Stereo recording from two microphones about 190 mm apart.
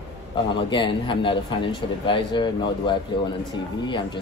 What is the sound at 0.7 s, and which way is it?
Speech, 25° left (ahead or behind).